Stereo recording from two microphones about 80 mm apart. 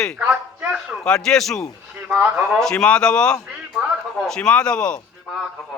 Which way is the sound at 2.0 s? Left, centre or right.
Centre.